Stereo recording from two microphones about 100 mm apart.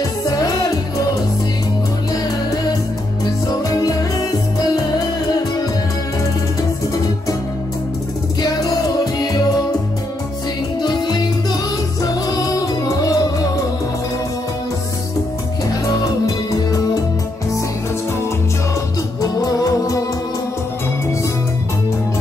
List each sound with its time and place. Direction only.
0.2 s music: 35° left (ahead or behind)
3.4 s music: 40° left (ahead or behind)
8.4 s music: 40° left (ahead or behind)
10.8 s music: 45° left (ahead or behind)
19.2 s music: 35° left (ahead or behind)